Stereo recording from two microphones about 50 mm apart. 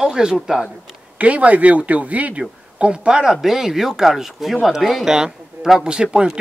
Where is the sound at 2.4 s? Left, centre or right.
Centre.